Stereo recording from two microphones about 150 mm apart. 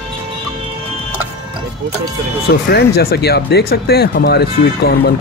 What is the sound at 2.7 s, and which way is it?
Speech, 90° left.